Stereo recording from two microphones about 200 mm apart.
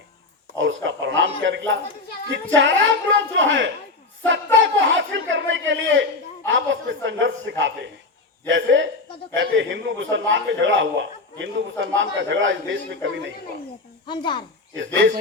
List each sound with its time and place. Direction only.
0.6 s a man's voice: 65° right (ahead or behind)
14.1 s speech: 25° left (ahead or behind)
14.8 s speech: 70° right (ahead or behind)